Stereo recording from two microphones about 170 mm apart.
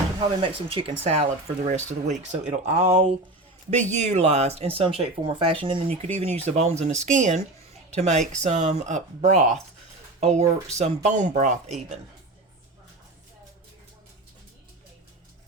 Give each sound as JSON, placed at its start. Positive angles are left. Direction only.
{"t": 0.2, "sound": "speech", "side_deg": -30}
{"t": 1.2, "sound": "speech", "side_deg": -45}